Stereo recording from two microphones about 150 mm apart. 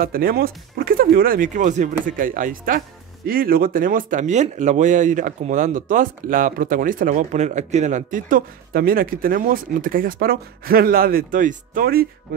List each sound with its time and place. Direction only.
0.0 s speech: 75° right (ahead or behind)